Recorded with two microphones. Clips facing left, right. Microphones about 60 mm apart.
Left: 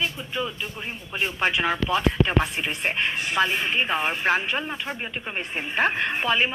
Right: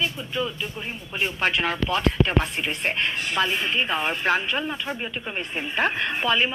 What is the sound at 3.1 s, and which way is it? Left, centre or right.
Speech, centre.